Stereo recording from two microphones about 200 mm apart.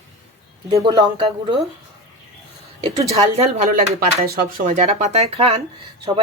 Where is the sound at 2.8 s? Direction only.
30° right (ahead or behind).